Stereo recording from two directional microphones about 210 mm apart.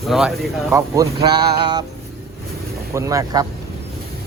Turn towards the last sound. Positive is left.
turn(degrees=-15)  # may be behind; listen again after turning